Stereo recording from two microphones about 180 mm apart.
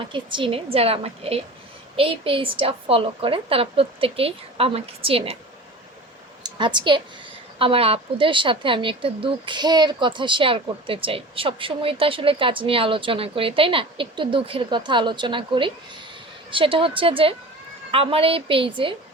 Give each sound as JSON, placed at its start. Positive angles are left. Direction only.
{"t": 0.0, "sound": "a woman's voice", "side_deg": -25}
{"t": 6.4, "sound": "a woman's voice", "side_deg": -25}